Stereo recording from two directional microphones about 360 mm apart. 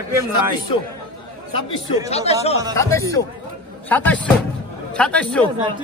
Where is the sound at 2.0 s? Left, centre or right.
Centre.